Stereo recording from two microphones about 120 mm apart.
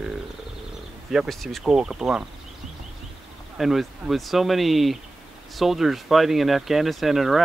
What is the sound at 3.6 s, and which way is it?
Speech, centre (ahead or behind).